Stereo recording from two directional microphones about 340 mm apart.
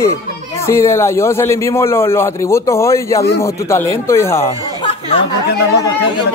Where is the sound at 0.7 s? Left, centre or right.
Centre.